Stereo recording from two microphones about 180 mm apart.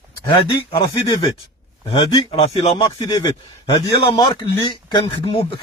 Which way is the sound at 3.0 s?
20° left (ahead or behind).